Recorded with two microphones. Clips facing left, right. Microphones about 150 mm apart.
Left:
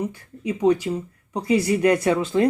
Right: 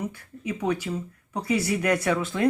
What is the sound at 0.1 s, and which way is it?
Speech, 30° left (ahead or behind).